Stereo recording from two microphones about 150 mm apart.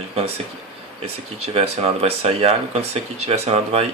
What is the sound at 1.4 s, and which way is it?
Speech, 45° right (ahead or behind).